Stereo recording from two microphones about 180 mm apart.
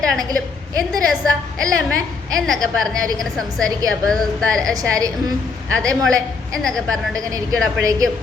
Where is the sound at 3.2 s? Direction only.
Centre (ahead or behind).